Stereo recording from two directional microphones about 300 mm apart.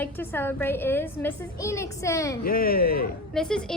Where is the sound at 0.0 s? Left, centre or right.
Centre.